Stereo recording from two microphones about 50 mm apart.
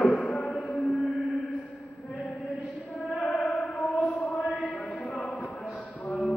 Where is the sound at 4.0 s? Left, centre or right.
Left.